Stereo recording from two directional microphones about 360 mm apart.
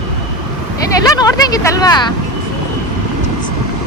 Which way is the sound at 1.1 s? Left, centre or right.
Centre.